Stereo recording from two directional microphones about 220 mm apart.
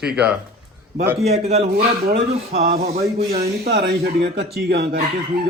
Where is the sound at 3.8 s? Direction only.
50° right (ahead or behind).